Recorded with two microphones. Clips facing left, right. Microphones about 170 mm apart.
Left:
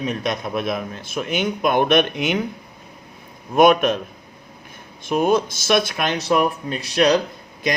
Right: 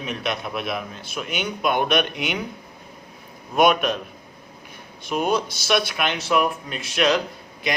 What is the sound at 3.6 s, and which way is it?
Speech, 50° left (ahead or behind).